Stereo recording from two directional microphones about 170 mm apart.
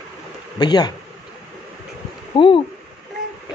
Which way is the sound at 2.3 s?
30° left (ahead or behind).